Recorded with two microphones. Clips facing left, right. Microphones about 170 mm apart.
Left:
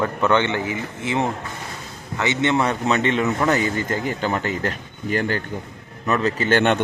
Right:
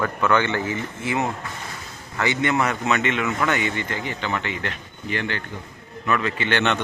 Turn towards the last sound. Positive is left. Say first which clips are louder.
# left 4 dB
turn(degrees=45)  # may be behind; listen again after turning